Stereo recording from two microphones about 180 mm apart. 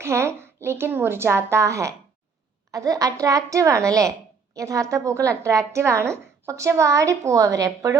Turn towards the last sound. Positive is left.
turn(degrees=-20)  # may be behind; listen again after turning